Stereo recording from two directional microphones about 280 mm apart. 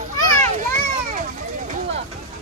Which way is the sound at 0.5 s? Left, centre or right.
Right.